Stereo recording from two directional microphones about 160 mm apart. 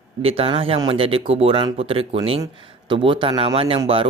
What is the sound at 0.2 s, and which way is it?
Speech, 35° right (ahead or behind).